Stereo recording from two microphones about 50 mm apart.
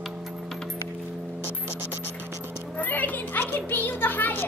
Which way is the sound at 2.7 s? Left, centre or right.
Left.